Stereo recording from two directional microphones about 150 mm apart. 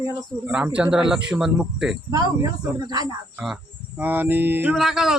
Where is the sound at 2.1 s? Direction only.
25° right (ahead or behind).